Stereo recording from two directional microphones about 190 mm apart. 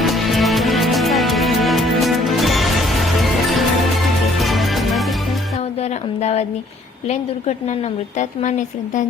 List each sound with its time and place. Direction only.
0.0 s music: centre (ahead or behind)
6.1 s speech: 35° left (ahead or behind)